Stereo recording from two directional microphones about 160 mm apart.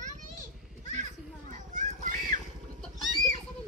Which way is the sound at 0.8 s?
50° right (ahead or behind).